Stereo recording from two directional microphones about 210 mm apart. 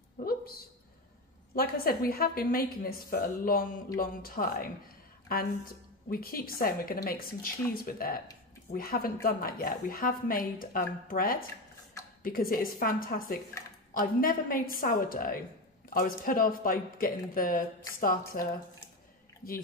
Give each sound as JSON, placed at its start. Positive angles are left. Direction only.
{"t": 0.2, "sound": "a sound", "side_deg": 45}
{"t": 1.5, "sound": "a woman's voice", "side_deg": 45}
{"t": 6.0, "sound": "a woman's voice", "side_deg": 45}